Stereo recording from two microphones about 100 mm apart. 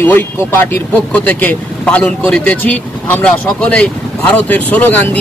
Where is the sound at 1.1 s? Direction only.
15° left (ahead or behind).